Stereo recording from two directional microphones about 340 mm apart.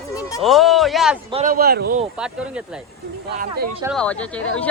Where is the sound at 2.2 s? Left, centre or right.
Centre.